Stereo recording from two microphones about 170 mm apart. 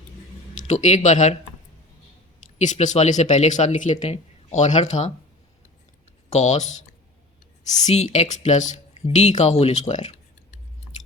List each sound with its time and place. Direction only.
0.7 s speech: 45° left (ahead or behind)
2.6 s speech: 45° left (ahead or behind)
6.3 s speech: 45° left (ahead or behind)